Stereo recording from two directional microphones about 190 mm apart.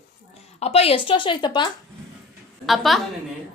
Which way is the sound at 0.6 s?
35° left (ahead or behind).